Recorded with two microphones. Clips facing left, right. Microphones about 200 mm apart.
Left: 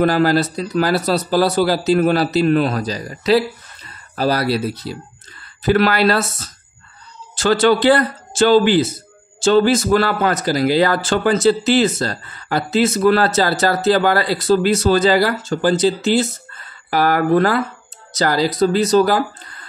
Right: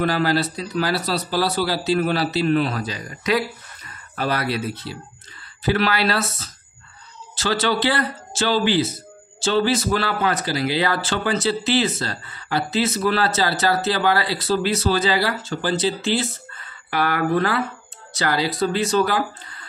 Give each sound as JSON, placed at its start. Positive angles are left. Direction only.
{"t": 0.0, "sound": "a man's voice", "side_deg": 45}
{"t": 5.6, "sound": "a man's voice", "side_deg": 50}